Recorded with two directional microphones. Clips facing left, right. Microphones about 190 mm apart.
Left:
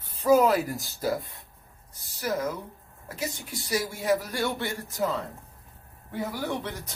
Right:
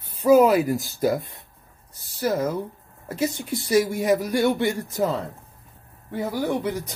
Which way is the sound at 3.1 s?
20° right (ahead or behind).